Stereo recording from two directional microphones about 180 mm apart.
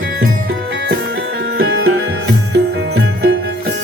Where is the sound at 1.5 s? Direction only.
65° right (ahead or behind).